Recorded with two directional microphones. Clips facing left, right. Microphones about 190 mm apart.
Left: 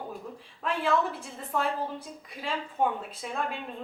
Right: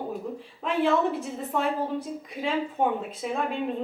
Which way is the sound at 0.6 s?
Centre (ahead or behind).